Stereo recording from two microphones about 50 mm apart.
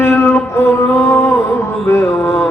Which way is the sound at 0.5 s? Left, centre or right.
Left.